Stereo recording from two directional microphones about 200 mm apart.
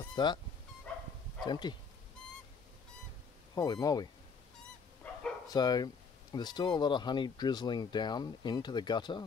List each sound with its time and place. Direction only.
0.0 s dog: 20° left (ahead or behind)
0.9 s bow-wow: 5° left (ahead or behind)
1.4 s speech: 20° left (ahead or behind)
3.5 s speech: 20° left (ahead or behind)
5.5 s speech: 20° left (ahead or behind)